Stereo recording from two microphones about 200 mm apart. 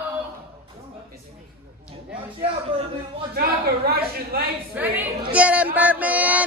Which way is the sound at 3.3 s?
50° right (ahead or behind).